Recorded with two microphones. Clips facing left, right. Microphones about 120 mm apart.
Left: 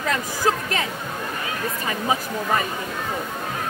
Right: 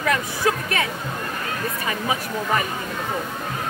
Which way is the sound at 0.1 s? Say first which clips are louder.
Even; 30° left (ahead or behind).